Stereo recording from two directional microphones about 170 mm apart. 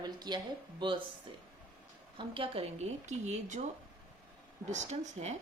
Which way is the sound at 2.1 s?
30° right (ahead or behind).